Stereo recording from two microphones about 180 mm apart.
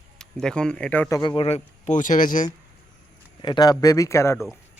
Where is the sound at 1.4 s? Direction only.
35° left (ahead or behind).